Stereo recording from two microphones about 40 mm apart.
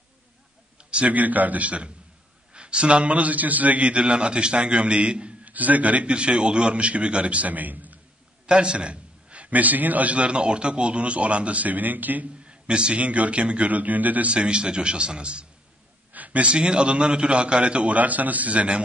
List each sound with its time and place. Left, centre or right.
0.7 s a sound: right
1.1 s a man's voice: right
5.4 s a man's voice: right
8.5 s a man's voice: right
12.4 s a man's voice: right
13.7 s a man's voice: right
14.3 s a man's voice: right
16.1 s a man's voice: right
17.9 s a man's voice: right